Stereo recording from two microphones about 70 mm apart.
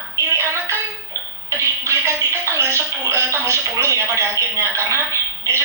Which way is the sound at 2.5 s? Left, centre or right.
Right.